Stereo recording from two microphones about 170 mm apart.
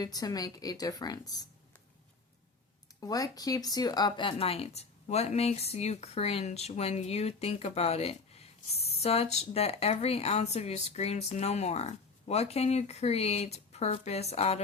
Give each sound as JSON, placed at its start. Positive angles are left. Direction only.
{"t": 0.0, "sound": "a woman's voice", "side_deg": 25}
{"t": 3.0, "sound": "speech", "side_deg": 20}